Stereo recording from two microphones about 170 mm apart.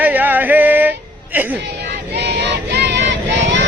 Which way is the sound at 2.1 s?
80° right.